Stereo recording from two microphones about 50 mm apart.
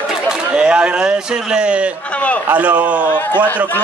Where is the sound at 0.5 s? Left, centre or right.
Right.